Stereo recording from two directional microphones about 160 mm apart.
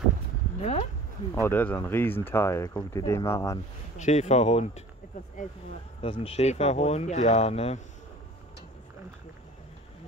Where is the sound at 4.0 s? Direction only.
45° left (ahead or behind).